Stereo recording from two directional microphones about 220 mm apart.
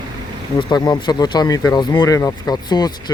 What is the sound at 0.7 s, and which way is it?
Speech, 20° left (ahead or behind).